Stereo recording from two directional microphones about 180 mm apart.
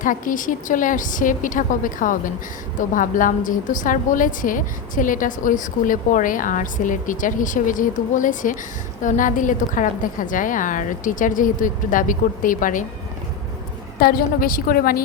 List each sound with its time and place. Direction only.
0.0 s a woman's voice: 45° left (ahead or behind)
14.0 s a woman's voice: 55° left (ahead or behind)